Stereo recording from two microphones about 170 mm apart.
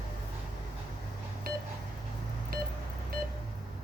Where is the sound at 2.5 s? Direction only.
55° right (ahead or behind).